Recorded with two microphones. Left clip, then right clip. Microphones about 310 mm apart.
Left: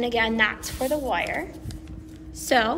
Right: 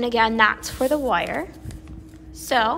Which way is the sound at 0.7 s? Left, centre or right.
Right.